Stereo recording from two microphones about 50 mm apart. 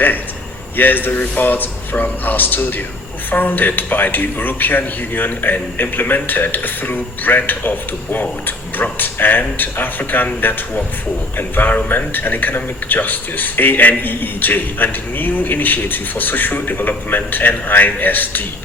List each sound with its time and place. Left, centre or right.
0.8 s speech: left